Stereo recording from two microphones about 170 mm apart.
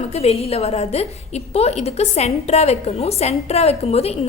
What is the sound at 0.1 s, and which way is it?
A woman's voice, 35° left (ahead or behind).